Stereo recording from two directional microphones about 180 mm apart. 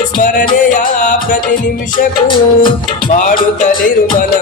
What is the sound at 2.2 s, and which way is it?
Music, 25° left (ahead or behind).